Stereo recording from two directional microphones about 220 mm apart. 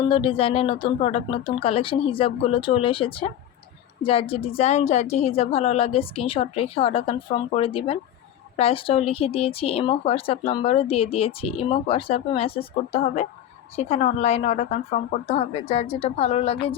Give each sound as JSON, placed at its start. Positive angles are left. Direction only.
{"t": 0.0, "sound": "a woman's voice", "side_deg": 25}